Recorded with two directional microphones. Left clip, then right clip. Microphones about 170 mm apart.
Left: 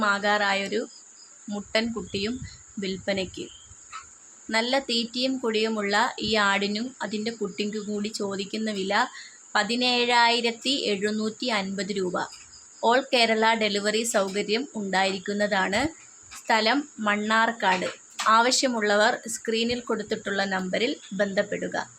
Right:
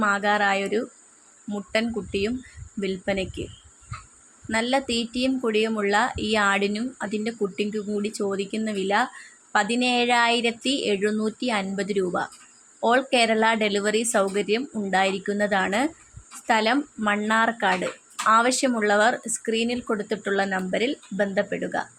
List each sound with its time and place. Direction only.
0.0 s speech: 15° right (ahead or behind)
4.4 s speech: 15° right (ahead or behind)